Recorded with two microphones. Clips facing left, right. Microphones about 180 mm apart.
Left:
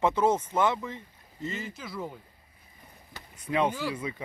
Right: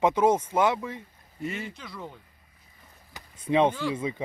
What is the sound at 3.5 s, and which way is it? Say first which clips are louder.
Speech: right 5 dB; 25° right (ahead or behind).